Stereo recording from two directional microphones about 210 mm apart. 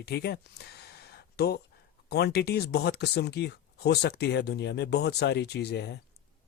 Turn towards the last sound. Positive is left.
turn(degrees=50)  # may be behind; listen again after turning